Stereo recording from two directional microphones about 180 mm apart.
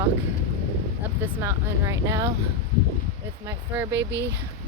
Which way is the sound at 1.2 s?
15° right (ahead or behind).